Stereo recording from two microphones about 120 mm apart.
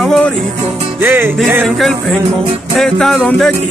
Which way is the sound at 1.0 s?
20° right (ahead or behind).